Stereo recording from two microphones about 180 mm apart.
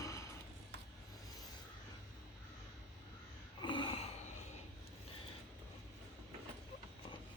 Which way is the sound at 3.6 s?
25° left (ahead or behind).